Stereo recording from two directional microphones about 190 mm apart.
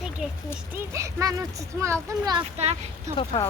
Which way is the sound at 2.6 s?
35° right (ahead or behind).